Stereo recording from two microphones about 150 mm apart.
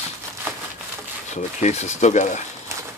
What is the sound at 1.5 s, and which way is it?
Speech, 50° left (ahead or behind).